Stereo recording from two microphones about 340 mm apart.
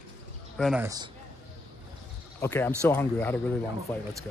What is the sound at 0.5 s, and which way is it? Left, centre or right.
Speech, centre.